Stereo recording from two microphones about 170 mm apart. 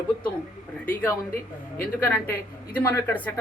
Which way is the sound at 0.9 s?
15° left (ahead or behind).